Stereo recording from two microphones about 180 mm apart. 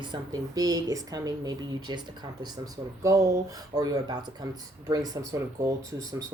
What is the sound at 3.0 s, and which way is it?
Speech, 20° right (ahead or behind).